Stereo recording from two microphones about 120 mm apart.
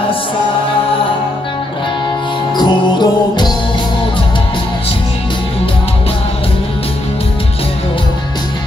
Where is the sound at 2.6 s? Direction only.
35° left (ahead or behind).